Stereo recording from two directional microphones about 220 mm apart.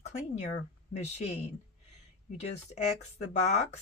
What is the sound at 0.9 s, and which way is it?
A woman's voice, 30° left (ahead or behind).